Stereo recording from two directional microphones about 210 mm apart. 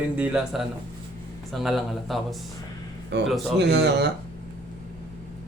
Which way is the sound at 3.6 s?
55° right (ahead or behind).